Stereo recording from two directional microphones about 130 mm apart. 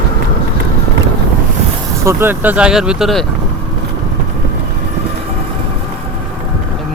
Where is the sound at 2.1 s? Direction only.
15° right (ahead or behind); by 3.3 s centre (ahead or behind).